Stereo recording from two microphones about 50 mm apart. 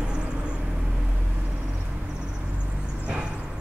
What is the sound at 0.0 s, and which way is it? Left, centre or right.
Vehicle, centre.